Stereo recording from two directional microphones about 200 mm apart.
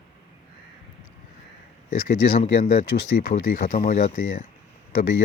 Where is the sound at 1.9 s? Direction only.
45° left (ahead or behind).